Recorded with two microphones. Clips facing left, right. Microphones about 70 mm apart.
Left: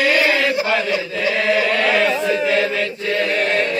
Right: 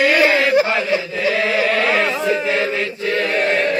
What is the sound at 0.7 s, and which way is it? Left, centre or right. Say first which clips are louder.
Chant: even; right.